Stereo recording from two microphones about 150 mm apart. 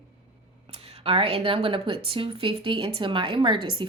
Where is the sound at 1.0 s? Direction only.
40° right (ahead or behind).